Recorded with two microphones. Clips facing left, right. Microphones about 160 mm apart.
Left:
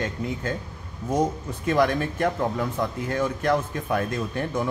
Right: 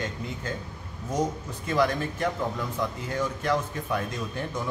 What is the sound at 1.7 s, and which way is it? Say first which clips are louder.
Speech: left 3 dB; 60° left (ahead or behind).